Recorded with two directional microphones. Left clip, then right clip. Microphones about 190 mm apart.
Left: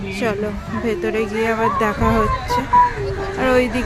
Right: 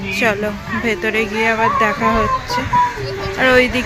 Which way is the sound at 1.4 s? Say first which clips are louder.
Right 4 dB; 20° left (ahead or behind).